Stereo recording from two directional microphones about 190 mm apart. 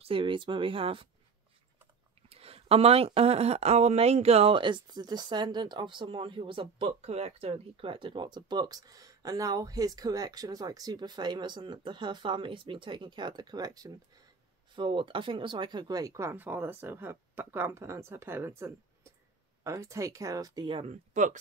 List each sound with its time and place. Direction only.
0.0 s speech: 25° right (ahead or behind)
2.2 s speech: 30° right (ahead or behind)